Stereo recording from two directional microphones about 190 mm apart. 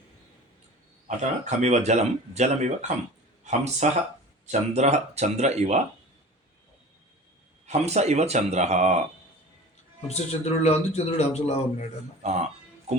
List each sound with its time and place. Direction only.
1.0 s speech: 40° right (ahead or behind)
7.7 s speech: 35° right (ahead or behind)
10.1 s a man's voice: 35° left (ahead or behind)
12.2 s speech: 35° right (ahead or behind)